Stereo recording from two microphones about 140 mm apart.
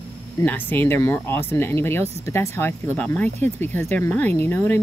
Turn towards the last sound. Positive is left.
turn(degrees=15)  # may be behind; listen again after turning